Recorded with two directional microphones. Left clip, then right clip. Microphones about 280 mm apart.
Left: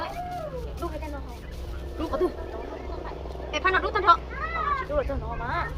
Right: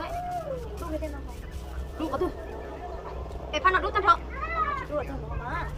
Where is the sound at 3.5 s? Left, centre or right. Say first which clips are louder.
Even; centre.